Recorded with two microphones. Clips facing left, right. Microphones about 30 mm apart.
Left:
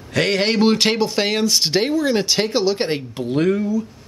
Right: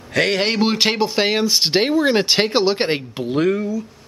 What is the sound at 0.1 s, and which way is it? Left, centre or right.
Speech, centre.